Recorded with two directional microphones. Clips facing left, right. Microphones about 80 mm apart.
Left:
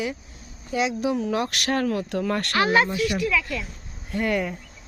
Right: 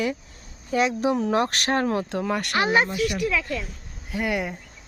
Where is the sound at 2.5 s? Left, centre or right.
Centre.